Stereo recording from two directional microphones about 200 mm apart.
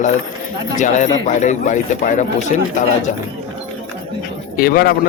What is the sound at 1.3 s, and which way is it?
Speech, 35° left (ahead or behind).